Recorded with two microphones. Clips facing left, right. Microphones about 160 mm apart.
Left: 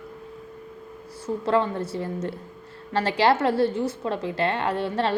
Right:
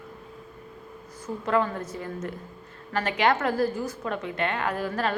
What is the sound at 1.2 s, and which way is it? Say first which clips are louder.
A woman's voice: left 3 dB; 30° left (ahead or behind).